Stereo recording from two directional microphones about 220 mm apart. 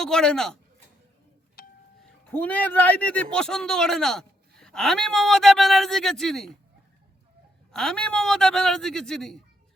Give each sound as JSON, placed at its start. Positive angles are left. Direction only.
{"t": 0.0, "sound": "speech", "side_deg": 5}
{"t": 1.6, "sound": "a sound", "side_deg": 40}
{"t": 2.3, "sound": "speech", "side_deg": 5}
{"t": 7.7, "sound": "speech", "side_deg": 0}